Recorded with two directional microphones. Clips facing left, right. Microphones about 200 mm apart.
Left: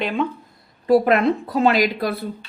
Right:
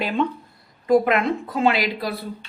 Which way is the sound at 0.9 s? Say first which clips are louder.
Left 2 dB; 35° left (ahead or behind).